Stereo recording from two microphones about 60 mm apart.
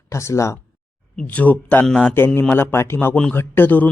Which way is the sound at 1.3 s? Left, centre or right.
Left.